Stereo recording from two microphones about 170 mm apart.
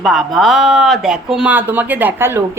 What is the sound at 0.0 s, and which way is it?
Speech, centre (ahead or behind).